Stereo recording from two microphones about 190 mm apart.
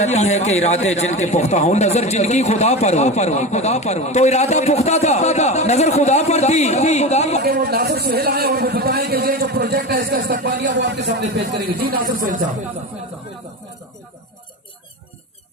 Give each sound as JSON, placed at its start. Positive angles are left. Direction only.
{"t": 0.0, "sound": "a man's voice", "side_deg": 35}
{"t": 7.4, "sound": "a man's voice", "side_deg": -55}
{"t": 10.8, "sound": "a man's voice", "side_deg": -65}
{"t": 11.9, "sound": "speech", "side_deg": -45}